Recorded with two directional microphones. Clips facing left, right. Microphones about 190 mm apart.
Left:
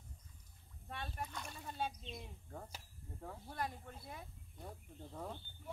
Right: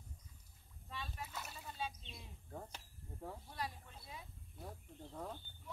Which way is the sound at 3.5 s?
55° left (ahead or behind).